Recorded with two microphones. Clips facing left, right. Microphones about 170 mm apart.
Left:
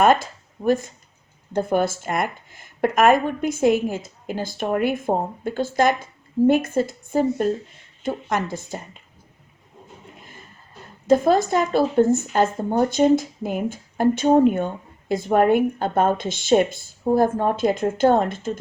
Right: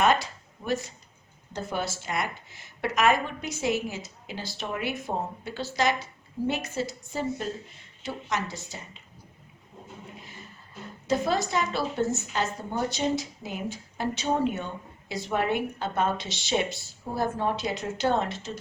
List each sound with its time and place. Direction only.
0.0 s a sound: 50° left (ahead or behind)
1.5 s a woman's voice: 55° left (ahead or behind)
11.0 s a woman's voice: 50° left (ahead or behind)